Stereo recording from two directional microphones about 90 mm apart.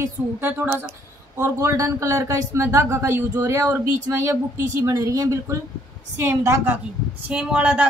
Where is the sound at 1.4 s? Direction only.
35° right (ahead or behind).